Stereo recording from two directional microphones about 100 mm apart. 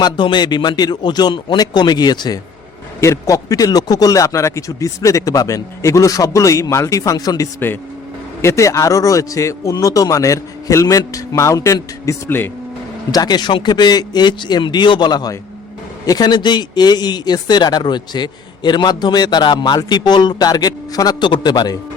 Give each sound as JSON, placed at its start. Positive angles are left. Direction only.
{"t": 0.0, "sound": "speech", "side_deg": 50}
{"t": 3.0, "sound": "a man's voice", "side_deg": 30}
{"t": 13.1, "sound": "speech", "side_deg": 40}